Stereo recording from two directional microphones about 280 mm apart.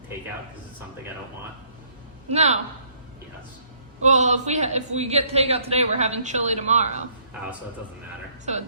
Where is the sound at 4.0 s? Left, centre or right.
Right.